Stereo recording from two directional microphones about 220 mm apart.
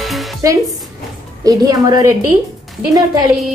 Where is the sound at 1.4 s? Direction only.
15° right (ahead or behind).